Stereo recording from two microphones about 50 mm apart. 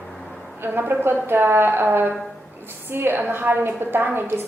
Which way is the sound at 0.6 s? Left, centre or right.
Right.